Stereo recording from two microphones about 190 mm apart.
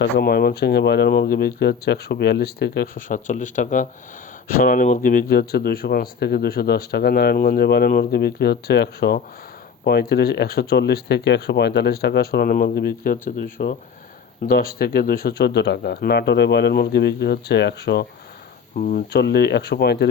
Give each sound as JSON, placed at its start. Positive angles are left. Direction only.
{"t": 0.0, "sound": "speech", "side_deg": 55}
{"t": 13.4, "sound": "speech", "side_deg": 60}
{"t": 14.4, "sound": "speech", "side_deg": 50}
{"t": 18.8, "sound": "speech", "side_deg": 45}
{"t": 19.1, "sound": "speech", "side_deg": 60}